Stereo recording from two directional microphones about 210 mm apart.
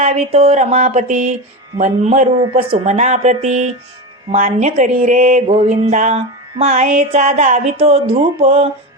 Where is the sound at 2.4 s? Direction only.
25° right (ahead or behind).